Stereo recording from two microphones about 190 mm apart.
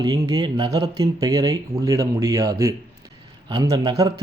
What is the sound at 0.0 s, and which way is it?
Speech, 20° right (ahead or behind).